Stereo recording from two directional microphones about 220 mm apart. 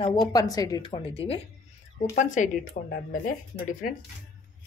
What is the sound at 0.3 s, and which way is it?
Speech, 15° left (ahead or behind).